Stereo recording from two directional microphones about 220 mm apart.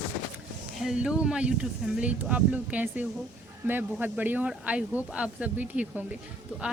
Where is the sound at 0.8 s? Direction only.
5° right (ahead or behind).